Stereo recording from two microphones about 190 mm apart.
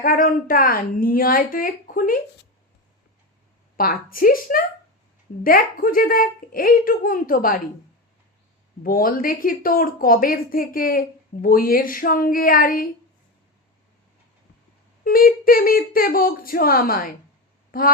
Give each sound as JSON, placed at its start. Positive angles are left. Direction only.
{"t": 0.0, "sound": "a woman's voice", "side_deg": 50}
{"t": 3.8, "sound": "a woman's voice", "side_deg": 50}
{"t": 8.8, "sound": "a woman's voice", "side_deg": 50}
{"t": 15.0, "sound": "a woman's voice", "side_deg": 50}
{"t": 17.7, "sound": "a sound", "side_deg": 50}